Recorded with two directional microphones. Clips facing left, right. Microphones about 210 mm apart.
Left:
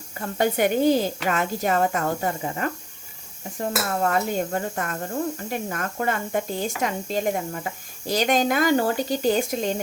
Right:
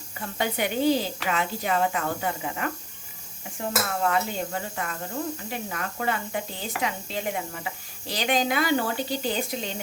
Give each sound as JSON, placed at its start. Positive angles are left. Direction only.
{"t": 0.2, "sound": "speech", "side_deg": 45}
{"t": 4.0, "sound": "speech", "side_deg": 45}